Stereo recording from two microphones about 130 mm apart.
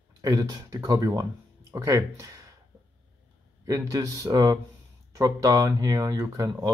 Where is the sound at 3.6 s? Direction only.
25° right (ahead or behind).